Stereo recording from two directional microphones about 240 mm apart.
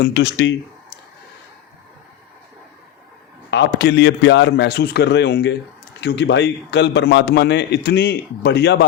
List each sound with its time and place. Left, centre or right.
0.0 s speech: left
3.5 s a man's voice: left